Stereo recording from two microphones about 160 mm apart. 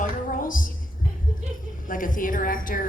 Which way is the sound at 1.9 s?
60° left (ahead or behind).